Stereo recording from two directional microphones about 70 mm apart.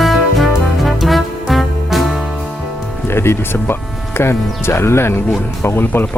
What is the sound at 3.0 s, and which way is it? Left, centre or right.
Speech, left.